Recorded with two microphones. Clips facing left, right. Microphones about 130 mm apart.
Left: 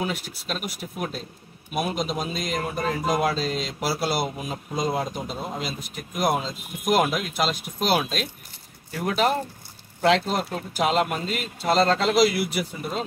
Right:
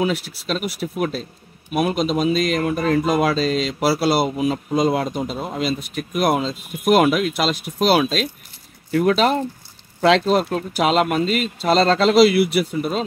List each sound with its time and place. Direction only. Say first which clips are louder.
0.0 s speech: right 7 dB; 80° right